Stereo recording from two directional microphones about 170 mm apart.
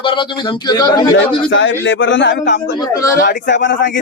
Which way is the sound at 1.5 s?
90° left.